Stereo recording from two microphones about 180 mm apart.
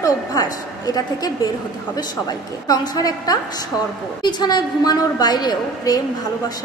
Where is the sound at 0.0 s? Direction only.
20° left (ahead or behind).